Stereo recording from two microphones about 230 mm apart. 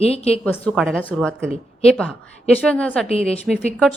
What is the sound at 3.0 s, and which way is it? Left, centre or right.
Speech, left.